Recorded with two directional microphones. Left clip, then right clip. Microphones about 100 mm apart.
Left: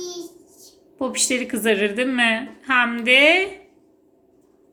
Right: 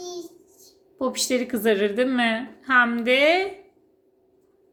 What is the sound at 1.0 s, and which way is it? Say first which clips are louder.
A woman's voice: left 1 dB; 30° right (ahead or behind).